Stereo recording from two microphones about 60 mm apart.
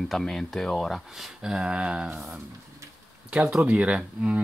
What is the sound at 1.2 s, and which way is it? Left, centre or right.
Speech, centre.